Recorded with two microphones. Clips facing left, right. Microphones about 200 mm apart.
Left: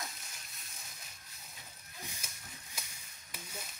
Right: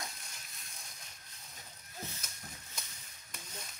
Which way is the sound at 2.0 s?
10° left (ahead or behind).